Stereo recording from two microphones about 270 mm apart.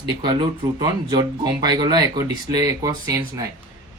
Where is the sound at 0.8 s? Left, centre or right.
Centre.